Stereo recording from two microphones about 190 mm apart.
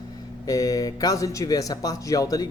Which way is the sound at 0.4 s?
20° left (ahead or behind).